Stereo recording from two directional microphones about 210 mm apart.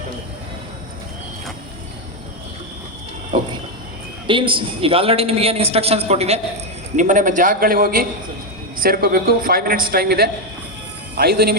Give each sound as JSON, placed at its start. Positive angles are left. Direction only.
{"t": 4.3, "sound": "a man's voice", "side_deg": -25}